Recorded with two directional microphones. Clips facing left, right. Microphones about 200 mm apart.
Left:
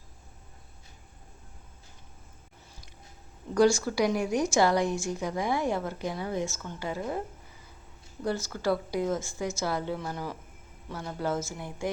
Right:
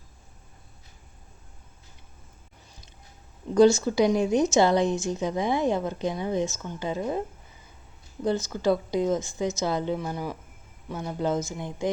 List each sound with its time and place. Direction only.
3.5 s a woman's voice: 20° right (ahead or behind)
8.2 s a woman's voice: 20° right (ahead or behind)